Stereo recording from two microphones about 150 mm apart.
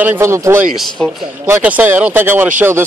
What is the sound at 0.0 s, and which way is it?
Speech, 15° right (ahead or behind).